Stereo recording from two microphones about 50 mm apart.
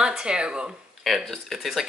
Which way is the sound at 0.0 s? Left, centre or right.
Centre.